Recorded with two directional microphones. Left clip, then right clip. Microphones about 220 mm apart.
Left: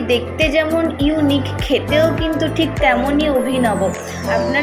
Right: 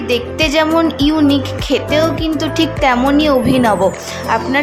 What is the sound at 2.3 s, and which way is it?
Speech, 15° right (ahead or behind).